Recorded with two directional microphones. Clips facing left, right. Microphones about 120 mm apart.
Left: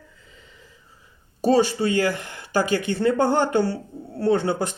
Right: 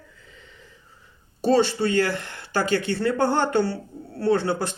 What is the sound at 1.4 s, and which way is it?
Speech, 10° left (ahead or behind).